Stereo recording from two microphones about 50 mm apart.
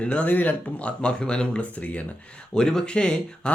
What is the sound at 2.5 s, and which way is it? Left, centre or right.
Speech, centre.